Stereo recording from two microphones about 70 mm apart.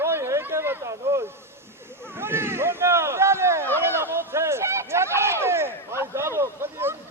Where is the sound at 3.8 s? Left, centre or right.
Right.